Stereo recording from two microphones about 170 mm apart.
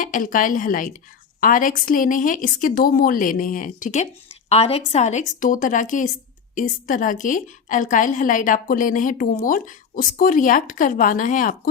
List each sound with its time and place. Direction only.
0.0 s a woman's voice: 50° left (ahead or behind)